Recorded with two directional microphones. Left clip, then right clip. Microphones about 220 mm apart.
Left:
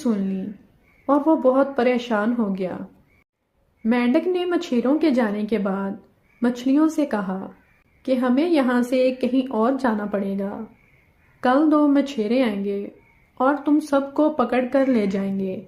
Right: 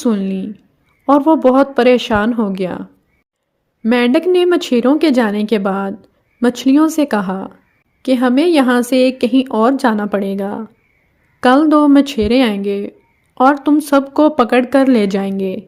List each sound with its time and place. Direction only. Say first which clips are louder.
0.0 s a woman's voice: right 7 dB; 50° right (ahead or behind)
3.8 s a woman's voice: right 8 dB; 45° right (ahead or behind)